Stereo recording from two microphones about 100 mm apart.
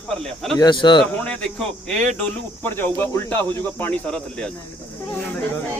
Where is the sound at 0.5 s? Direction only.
50° left (ahead or behind).